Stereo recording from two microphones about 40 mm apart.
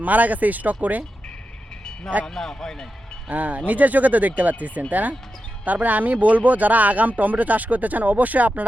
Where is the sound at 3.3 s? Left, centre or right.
Right.